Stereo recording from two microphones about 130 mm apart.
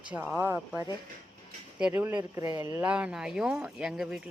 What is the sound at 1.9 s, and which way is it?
Speech, 15° right (ahead or behind).